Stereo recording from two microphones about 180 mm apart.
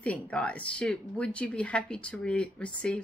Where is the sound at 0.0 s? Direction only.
5° left (ahead or behind).